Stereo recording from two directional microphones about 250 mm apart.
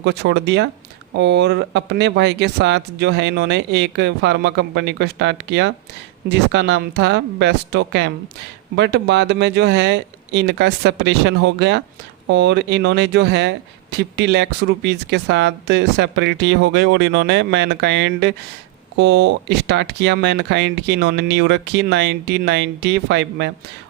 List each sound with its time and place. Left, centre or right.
0.0 s speech: right